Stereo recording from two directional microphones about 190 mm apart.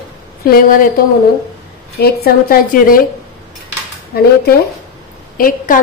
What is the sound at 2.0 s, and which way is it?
A woman's voice, 55° left (ahead or behind).